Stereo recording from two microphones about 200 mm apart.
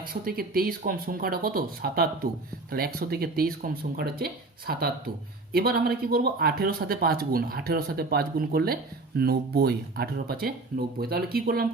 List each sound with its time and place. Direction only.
0.1 s speech: 45° right (ahead or behind)